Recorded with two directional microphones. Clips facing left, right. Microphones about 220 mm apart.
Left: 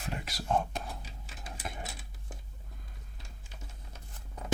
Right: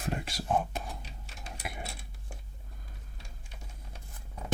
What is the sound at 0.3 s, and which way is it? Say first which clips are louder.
Whispering: right 2 dB; 25° right (ahead or behind).